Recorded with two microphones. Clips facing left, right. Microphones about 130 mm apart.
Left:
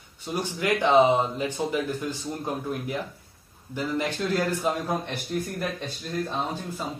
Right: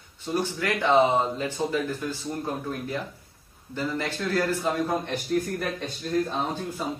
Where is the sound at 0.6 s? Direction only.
15° left (ahead or behind).